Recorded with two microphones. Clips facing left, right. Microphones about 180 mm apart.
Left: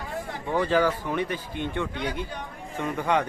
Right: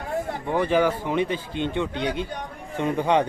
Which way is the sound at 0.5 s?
15° right (ahead or behind).